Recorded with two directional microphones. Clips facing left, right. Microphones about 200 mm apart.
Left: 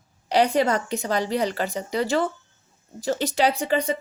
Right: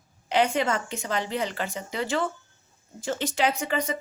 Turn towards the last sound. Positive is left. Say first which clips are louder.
# left 4 dB
turn(degrees=30)  # may be behind; listen again after turning